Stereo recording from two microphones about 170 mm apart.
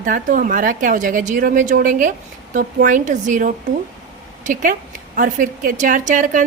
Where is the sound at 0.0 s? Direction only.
55° right (ahead or behind).